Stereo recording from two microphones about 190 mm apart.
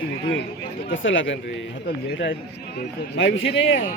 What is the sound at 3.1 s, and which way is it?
Speech, 80° left.